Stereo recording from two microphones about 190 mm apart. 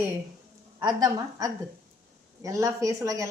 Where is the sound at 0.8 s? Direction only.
20° right (ahead or behind).